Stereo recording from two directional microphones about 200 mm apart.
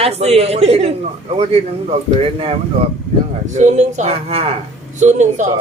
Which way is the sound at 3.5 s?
35° right (ahead or behind).